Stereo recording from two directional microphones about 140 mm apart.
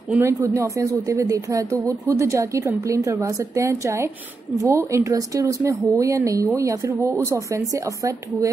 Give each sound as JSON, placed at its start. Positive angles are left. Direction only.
{"t": 0.1, "sound": "speech", "side_deg": -15}